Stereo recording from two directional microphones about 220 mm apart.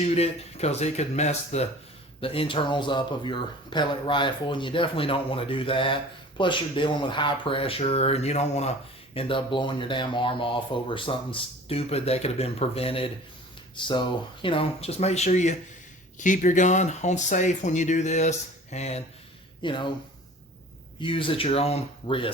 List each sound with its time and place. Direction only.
0.0 s speech: 30° left (ahead or behind)
21.0 s speech: 25° left (ahead or behind)